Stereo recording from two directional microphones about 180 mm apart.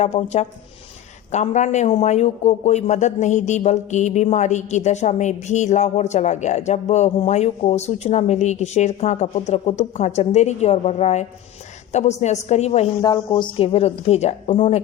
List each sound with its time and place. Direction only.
0.0 s a man's voice: 35° left (ahead or behind)
13.0 s a man's voice: 25° left (ahead or behind)